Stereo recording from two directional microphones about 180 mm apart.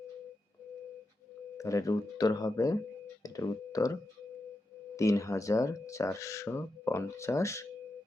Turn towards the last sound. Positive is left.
turn(degrees=15)  # may be behind; listen again after turning